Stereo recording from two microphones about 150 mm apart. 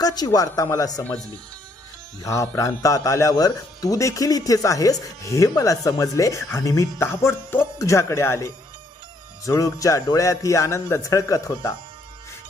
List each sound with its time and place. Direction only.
0.0 s a man's voice: 25° left (ahead or behind)
2.2 s a man's voice: 20° left (ahead or behind)
9.5 s a man's voice: 20° left (ahead or behind)